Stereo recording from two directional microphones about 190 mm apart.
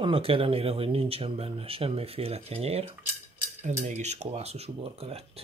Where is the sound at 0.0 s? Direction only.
30° right (ahead or behind).